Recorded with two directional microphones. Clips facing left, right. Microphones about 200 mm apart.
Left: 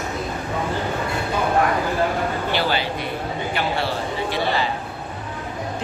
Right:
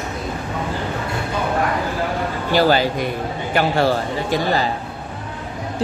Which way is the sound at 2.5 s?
40° right (ahead or behind).